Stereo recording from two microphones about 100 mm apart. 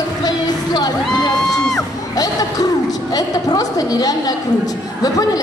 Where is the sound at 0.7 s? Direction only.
40° left (ahead or behind).